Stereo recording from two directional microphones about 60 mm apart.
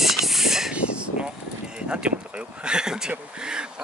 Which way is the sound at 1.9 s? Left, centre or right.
Centre.